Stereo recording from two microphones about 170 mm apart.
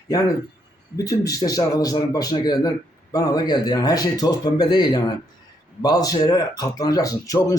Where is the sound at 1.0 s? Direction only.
20° left (ahead or behind).